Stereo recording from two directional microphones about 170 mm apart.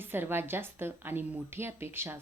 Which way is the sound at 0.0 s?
10° right (ahead or behind).